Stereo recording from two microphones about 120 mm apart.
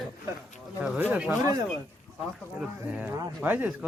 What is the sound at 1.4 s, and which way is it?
Speech, 30° right (ahead or behind).